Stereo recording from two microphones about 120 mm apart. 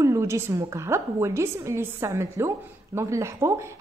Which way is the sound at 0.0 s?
25° right (ahead or behind).